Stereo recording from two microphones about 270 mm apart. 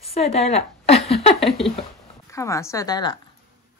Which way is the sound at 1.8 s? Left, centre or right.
Centre.